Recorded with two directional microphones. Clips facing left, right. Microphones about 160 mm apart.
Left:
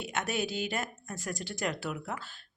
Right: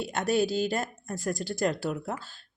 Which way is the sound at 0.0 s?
35° right (ahead or behind).